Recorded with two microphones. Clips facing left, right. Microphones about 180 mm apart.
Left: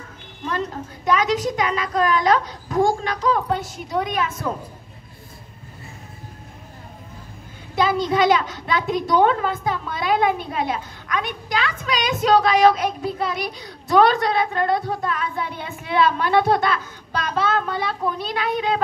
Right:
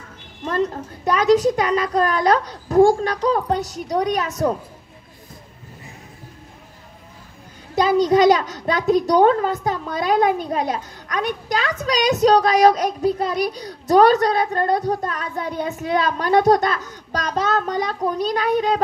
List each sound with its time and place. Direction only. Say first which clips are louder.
0.5 s a sound: right 5 dB; 40° right (ahead or behind)
1.6 s a child's voice: right 3 dB; 35° right (ahead or behind)
7.7 s a child's voice: right 4 dB; 40° right (ahead or behind)